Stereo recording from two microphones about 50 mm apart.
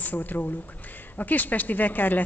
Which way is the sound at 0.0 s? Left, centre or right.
Left.